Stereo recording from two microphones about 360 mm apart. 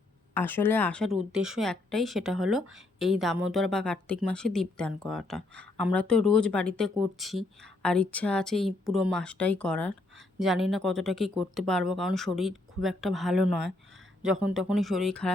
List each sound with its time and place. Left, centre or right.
0.3 s speech: centre